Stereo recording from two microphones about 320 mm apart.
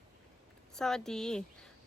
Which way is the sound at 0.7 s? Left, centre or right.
Centre.